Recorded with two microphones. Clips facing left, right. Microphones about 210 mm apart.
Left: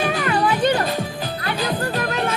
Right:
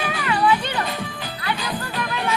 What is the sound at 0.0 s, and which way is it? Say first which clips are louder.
Music: left 2 dB; 40° left (ahead or behind).